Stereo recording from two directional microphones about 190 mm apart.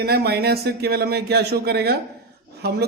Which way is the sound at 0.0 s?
55° right (ahead or behind).